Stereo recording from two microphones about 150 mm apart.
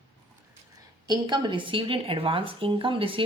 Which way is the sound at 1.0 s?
30° right (ahead or behind).